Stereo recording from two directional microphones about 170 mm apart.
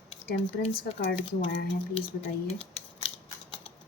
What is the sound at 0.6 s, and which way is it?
Speech, 35° left (ahead or behind).